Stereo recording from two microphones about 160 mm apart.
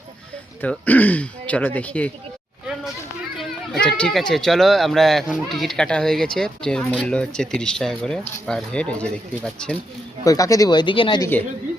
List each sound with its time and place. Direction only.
0.6 s speech: 10° left (ahead or behind)
3.3 s a child's voice: centre (ahead or behind)
10.2 s speech: 20° left (ahead or behind)
11.2 s speech: 10° left (ahead or behind)